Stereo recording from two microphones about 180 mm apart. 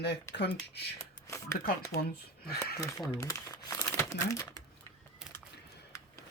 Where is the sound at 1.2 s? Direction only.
15° left (ahead or behind).